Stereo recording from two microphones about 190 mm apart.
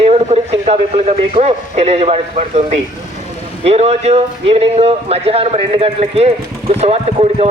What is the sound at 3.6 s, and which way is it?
A man's voice, 35° right (ahead or behind).